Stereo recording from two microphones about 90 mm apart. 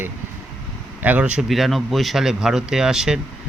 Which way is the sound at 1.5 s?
Centre (ahead or behind).